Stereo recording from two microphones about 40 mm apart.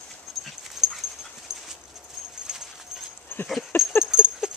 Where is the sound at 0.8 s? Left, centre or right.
Centre.